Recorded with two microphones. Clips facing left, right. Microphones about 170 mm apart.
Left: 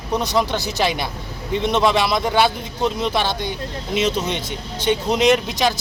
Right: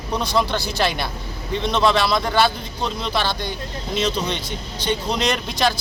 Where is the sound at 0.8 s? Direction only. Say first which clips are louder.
Left 1 dB; 15° left (ahead or behind).